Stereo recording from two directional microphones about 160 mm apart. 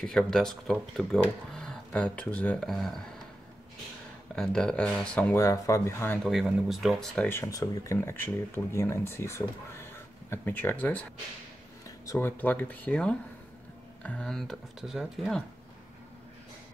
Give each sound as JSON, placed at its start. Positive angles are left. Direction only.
{"t": 0.0, "sound": "speech", "side_deg": 5}
{"t": 4.4, "sound": "speech", "side_deg": 5}
{"t": 5.4, "sound": "speech", "side_deg": 20}
{"t": 6.7, "sound": "speech", "side_deg": 0}
{"t": 7.2, "sound": "speech", "side_deg": 15}
{"t": 12.1, "sound": "speech", "side_deg": 15}